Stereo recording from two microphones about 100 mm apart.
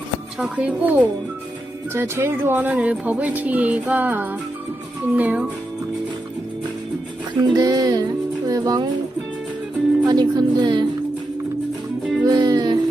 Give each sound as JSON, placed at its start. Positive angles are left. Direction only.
{"t": 0.3, "sound": "speech", "side_deg": -10}
{"t": 1.9, "sound": "speech", "side_deg": -25}
{"t": 7.4, "sound": "speech", "side_deg": -40}
{"t": 10.1, "sound": "speech", "side_deg": -45}
{"t": 12.2, "sound": "music", "side_deg": -40}